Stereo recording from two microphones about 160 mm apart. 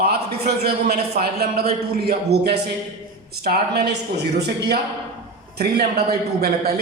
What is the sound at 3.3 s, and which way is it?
A man's voice, 80° right.